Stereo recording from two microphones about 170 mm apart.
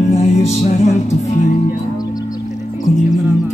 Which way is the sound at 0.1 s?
40° left (ahead or behind).